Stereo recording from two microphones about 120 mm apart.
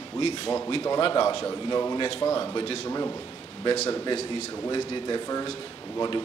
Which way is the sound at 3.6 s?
60° left (ahead or behind).